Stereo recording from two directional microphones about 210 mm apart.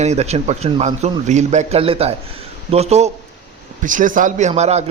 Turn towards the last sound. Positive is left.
turn(degrees=-30)  # may be behind; listen again after turning